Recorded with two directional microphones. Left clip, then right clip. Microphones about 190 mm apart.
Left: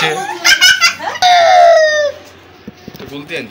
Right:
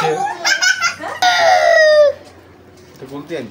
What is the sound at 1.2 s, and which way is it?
Fowl, 50° right (ahead or behind).